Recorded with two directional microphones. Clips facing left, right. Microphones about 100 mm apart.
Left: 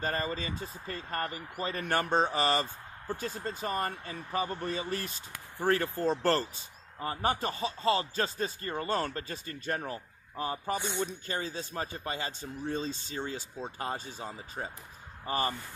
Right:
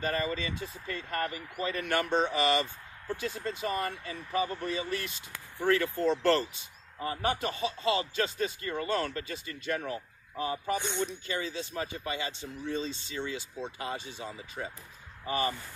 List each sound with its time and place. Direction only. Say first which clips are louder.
0.0 s speech: right 1 dB; 35° left (ahead or behind)
10.8 s speech: right 1 dB; 15° left (ahead or behind)
11.1 s speech: right 1 dB; 40° left (ahead or behind)